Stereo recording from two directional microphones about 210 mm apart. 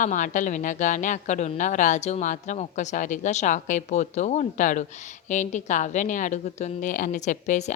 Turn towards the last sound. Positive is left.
turn(degrees=35)  # may be behind; listen again after turning